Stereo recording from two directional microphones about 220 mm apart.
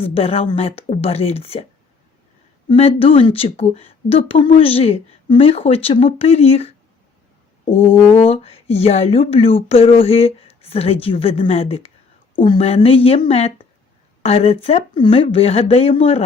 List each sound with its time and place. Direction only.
0.0 s a woman's voice: 25° left (ahead or behind)
2.6 s a woman's voice: 25° left (ahead or behind)
7.6 s brass instrument: 25° left (ahead or behind)
8.1 s a woman's voice: 25° left (ahead or behind)